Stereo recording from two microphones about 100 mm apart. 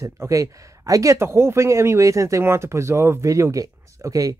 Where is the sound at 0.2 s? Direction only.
35° right (ahead or behind).